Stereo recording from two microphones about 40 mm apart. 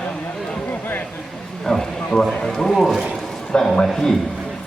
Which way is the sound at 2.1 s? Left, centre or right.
Left.